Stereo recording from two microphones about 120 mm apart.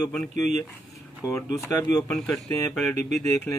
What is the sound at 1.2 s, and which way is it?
Speech, 20° left (ahead or behind).